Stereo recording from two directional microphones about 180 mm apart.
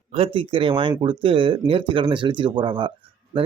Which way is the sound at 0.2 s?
30° right (ahead or behind).